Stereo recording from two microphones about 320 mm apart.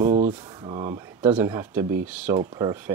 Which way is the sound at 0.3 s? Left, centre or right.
Centre.